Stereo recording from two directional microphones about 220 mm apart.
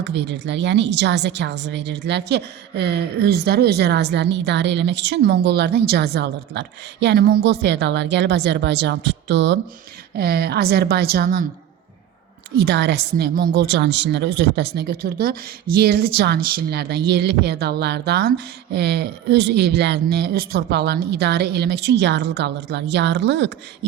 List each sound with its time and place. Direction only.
0.0 s a woman's voice: 50° right (ahead or behind)
12.5 s a woman's voice: 50° right (ahead or behind)